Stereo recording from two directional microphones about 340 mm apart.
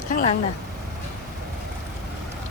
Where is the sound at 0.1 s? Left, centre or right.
Left.